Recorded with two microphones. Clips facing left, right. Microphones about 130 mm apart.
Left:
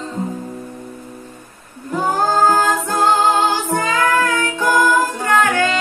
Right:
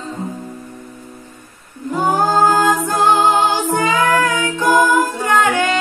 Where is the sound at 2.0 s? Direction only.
20° right (ahead or behind).